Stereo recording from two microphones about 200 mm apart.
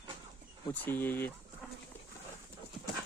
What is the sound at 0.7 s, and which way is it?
Speech, 10° left (ahead or behind).